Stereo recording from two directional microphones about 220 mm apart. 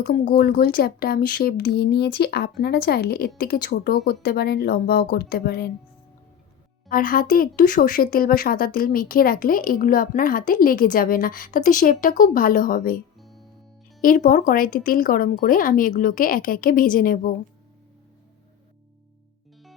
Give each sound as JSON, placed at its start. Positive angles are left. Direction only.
{"t": 0.1, "sound": "speech", "side_deg": 40}
{"t": 6.8, "sound": "speech", "side_deg": 40}
{"t": 13.1, "sound": "music", "side_deg": 0}
{"t": 14.0, "sound": "speech", "side_deg": 40}